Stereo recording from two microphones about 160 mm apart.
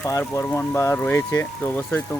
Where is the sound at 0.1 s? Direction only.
20° left (ahead or behind).